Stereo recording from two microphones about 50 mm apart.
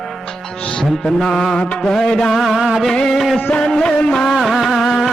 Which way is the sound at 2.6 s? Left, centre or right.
Centre.